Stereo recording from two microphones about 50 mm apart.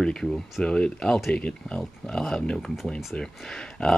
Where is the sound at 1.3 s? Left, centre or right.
Centre.